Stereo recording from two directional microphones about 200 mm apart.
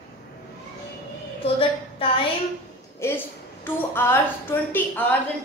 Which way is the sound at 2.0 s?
25° left (ahead or behind).